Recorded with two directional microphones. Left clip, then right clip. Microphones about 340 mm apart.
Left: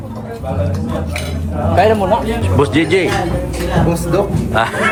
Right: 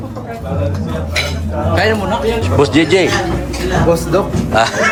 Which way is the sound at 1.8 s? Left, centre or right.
Centre.